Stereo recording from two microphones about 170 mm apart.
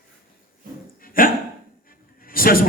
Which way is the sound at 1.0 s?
55° left (ahead or behind).